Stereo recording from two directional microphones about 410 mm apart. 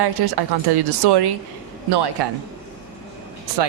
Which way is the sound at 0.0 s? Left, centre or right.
Right.